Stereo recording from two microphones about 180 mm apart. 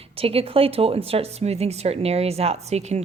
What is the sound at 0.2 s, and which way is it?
Speech, 30° right (ahead or behind).